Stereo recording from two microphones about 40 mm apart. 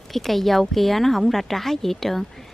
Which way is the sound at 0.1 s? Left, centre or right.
Centre.